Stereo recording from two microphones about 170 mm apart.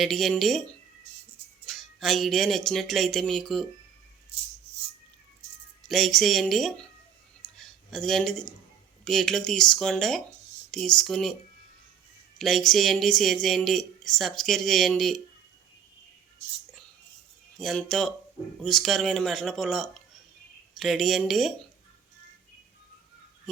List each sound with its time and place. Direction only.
0.0 s speech: centre (ahead or behind)
1.6 s speech: centre (ahead or behind)
4.3 s music: 35° right (ahead or behind)
5.9 s speech: centre (ahead or behind)
7.4 s a sound: 5° left (ahead or behind)
9.0 s speech: centre (ahead or behind)
12.4 s speech: centre (ahead or behind)
17.6 s speech: centre (ahead or behind)